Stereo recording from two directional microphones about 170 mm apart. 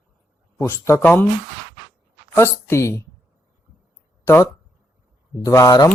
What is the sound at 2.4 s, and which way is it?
Speech, 15° left (ahead or behind).